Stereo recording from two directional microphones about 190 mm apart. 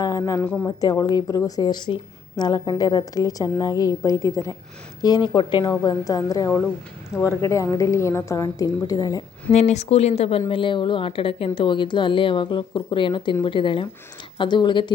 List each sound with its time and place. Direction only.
0.0 s a woman's voice: 20° left (ahead or behind)
9.5 s a woman's voice: 35° left (ahead or behind)